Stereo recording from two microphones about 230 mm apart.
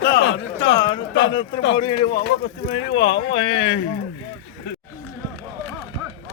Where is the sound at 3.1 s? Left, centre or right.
Left.